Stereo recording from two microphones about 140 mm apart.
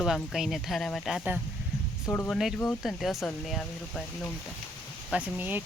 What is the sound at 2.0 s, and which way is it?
Speech, 10° left (ahead or behind).